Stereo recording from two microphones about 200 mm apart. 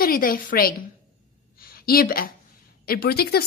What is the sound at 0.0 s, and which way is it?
A woman's voice, 45° left (ahead or behind).